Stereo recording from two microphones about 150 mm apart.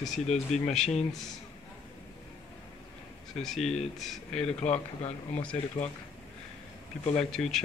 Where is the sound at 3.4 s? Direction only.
Centre (ahead or behind).